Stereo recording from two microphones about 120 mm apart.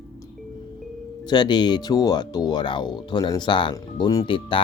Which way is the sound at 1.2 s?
35° left (ahead or behind).